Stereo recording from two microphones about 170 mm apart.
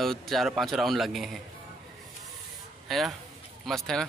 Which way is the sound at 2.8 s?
Centre (ahead or behind).